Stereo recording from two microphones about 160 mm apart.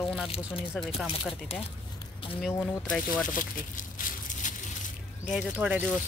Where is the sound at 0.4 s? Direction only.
Centre (ahead or behind).